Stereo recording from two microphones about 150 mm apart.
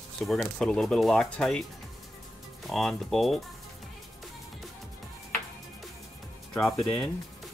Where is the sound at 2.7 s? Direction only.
Centre (ahead or behind).